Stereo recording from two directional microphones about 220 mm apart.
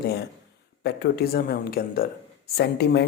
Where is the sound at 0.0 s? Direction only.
45° left (ahead or behind).